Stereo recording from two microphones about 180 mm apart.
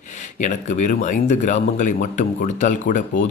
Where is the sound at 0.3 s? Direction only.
40° left (ahead or behind).